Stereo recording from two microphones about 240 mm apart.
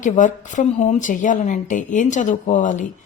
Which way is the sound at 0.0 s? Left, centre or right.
Left.